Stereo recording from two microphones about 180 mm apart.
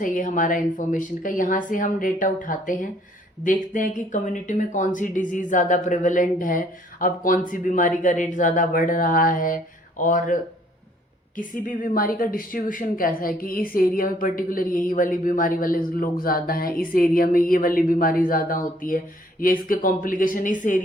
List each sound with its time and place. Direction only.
0.0 s speech: 45° left (ahead or behind)
11.3 s speech: 50° left (ahead or behind)